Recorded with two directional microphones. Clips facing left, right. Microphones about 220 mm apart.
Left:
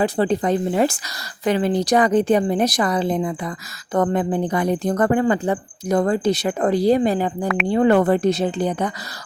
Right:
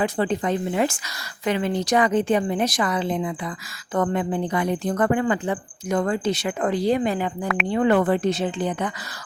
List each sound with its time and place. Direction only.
0.0 s speech: 35° left (ahead or behind)
7.4 s speech: centre (ahead or behind)
7.7 s speech: 40° left (ahead or behind)